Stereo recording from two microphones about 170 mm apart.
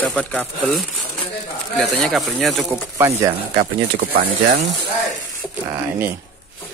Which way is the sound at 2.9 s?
20° right (ahead or behind).